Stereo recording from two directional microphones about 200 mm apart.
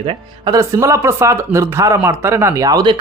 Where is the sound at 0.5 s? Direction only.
15° right (ahead or behind).